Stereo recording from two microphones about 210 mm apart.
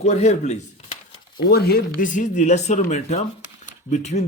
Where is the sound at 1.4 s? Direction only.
50° left (ahead or behind).